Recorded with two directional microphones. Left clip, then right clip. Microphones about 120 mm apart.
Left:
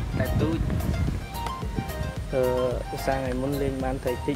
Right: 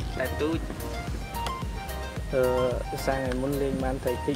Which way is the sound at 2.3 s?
Centre (ahead or behind).